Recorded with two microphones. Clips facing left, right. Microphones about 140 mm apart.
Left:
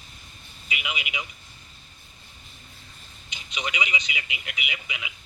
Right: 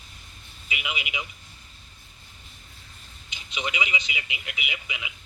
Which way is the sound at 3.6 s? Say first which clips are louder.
Even; 25° right (ahead or behind).